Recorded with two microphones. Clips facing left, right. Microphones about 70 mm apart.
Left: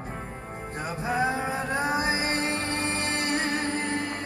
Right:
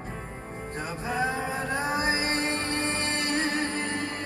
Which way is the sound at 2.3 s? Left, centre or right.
Right.